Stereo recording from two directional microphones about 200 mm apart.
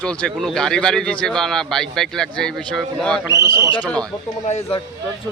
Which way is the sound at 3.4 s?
15° right (ahead or behind).